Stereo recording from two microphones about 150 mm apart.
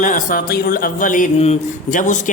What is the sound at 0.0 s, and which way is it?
A man's voice, 65° left (ahead or behind).